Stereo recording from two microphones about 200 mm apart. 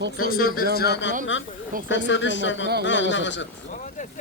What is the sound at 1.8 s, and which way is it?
A man's voice, 65° left (ahead or behind).